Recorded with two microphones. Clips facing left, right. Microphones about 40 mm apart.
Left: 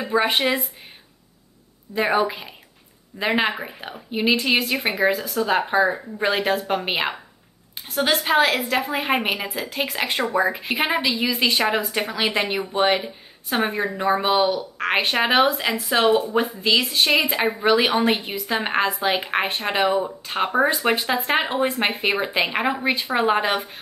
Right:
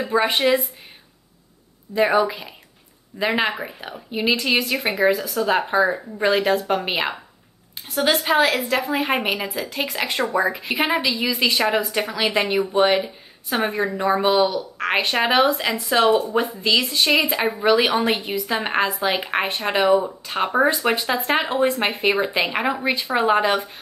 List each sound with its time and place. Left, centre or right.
0.0 s speech: centre
2.1 s speech: centre
3.2 s speech: centre
14.3 s speech: centre